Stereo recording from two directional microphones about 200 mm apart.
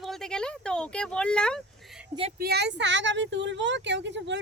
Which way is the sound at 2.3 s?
50° right (ahead or behind).